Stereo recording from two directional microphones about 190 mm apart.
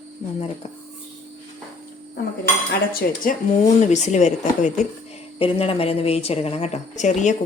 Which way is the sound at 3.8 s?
35° left (ahead or behind).